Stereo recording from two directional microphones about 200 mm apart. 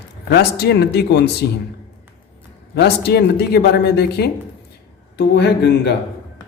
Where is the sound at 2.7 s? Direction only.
55° left (ahead or behind).